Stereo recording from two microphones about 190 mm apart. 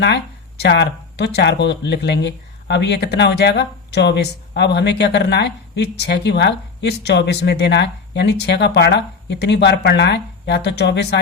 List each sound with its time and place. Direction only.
0.0 s speech: 65° left (ahead or behind)